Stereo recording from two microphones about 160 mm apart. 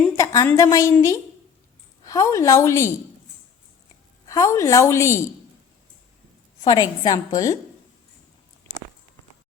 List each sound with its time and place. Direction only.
0.2 s a woman's voice: 20° left (ahead or behind)
4.3 s a woman's voice: 20° left (ahead or behind)
6.7 s a woman's voice: 25° left (ahead or behind)